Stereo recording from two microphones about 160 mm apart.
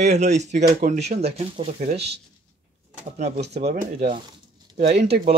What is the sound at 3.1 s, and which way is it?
Speech, 45° right (ahead or behind).